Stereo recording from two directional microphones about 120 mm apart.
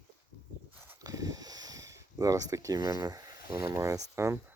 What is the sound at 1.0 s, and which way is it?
Speech, 30° right (ahead or behind).